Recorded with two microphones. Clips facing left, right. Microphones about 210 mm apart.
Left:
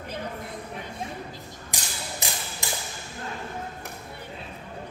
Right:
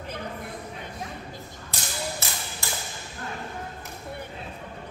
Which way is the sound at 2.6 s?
15° left (ahead or behind).